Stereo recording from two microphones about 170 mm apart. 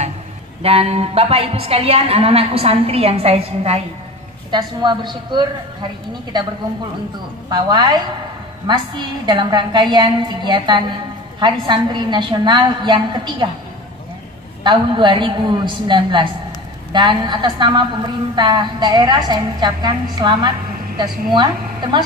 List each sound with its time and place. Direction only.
0.6 s a woman's voice: 35° right (ahead or behind)
4.5 s a woman's voice: 25° right (ahead or behind)
7.4 s a woman's voice: 25° right (ahead or behind)
14.6 s a woman's voice: 30° right (ahead or behind)